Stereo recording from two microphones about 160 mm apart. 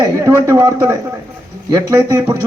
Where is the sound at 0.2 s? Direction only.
15° right (ahead or behind).